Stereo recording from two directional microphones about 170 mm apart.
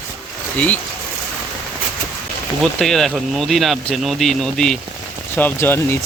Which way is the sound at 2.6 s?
Centre (ahead or behind).